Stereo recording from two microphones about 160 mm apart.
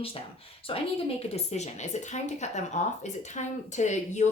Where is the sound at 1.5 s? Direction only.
45° left (ahead or behind).